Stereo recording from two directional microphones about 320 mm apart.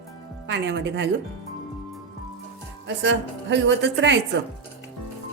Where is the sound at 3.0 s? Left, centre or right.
Right.